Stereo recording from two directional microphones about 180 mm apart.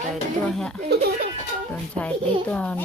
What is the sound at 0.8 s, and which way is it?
Speech, 65° right (ahead or behind).